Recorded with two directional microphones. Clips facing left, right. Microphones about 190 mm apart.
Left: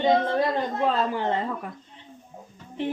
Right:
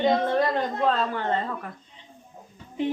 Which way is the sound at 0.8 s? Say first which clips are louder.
Left 1 dB; 10° left (ahead or behind).